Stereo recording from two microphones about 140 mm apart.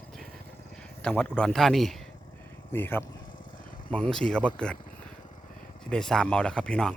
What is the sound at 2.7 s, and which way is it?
Speech, 15° left (ahead or behind).